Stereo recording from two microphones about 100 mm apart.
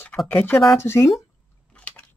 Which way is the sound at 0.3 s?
15° left (ahead or behind).